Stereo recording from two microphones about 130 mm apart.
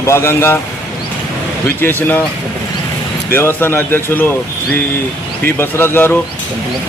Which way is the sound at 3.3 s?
15° left (ahead or behind).